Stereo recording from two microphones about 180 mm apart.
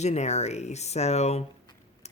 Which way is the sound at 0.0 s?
40° left (ahead or behind).